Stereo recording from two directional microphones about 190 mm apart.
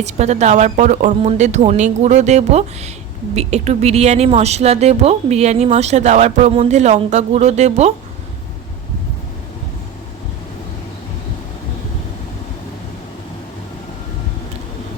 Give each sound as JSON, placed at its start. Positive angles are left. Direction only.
{"t": 0.0, "sound": "speech", "side_deg": -35}